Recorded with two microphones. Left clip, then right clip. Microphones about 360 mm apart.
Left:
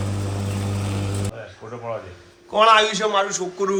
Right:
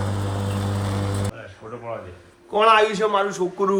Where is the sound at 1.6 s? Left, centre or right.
Left.